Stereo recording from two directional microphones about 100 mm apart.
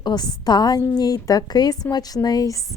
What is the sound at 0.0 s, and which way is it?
A woman's voice, 45° left (ahead or behind).